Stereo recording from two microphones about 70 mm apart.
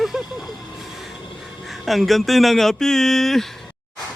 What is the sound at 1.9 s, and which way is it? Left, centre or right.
Speech, centre.